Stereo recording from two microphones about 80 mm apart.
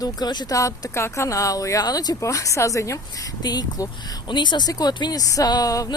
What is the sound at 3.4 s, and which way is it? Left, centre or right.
Speech, left.